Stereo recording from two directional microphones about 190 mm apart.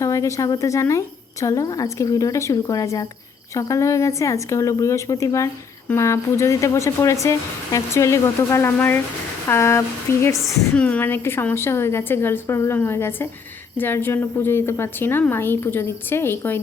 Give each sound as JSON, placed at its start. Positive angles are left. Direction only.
{"t": 0.0, "sound": "a woman's voice", "side_deg": 15}
{"t": 10.3, "sound": "a woman's voice", "side_deg": 0}